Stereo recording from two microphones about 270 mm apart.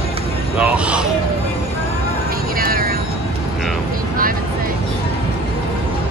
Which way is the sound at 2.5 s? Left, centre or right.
Right.